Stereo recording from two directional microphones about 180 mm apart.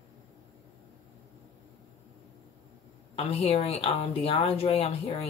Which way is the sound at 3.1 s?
35° left (ahead or behind).